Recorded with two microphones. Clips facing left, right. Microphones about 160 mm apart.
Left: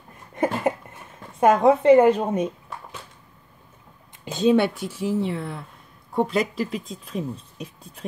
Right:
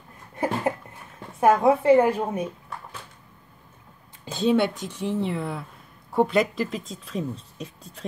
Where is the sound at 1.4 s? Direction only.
20° left (ahead or behind).